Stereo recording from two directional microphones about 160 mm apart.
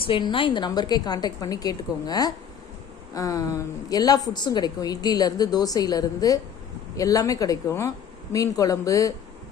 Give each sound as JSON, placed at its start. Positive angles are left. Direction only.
{"t": 0.0, "sound": "a woman's voice", "side_deg": 30}